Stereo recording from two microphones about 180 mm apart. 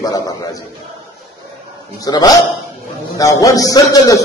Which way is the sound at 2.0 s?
20° left (ahead or behind).